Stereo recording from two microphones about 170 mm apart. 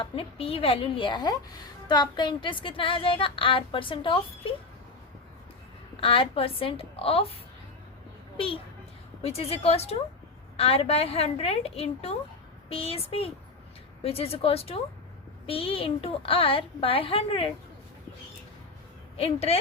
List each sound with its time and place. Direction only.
0.0 s speech: 35° left (ahead or behind)
6.0 s speech: 30° left (ahead or behind)
8.4 s speech: 30° left (ahead or behind)
19.1 s speech: 35° left (ahead or behind)